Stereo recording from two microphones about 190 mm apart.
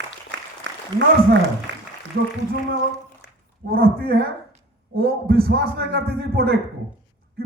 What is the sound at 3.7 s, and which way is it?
A man's voice, 50° right (ahead or behind).